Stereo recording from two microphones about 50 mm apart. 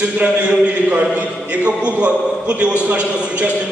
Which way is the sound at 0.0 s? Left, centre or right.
Right.